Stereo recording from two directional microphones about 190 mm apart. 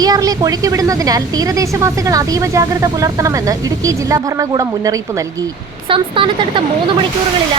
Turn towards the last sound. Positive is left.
turn(degrees=-25)  # may be behind; listen again after turning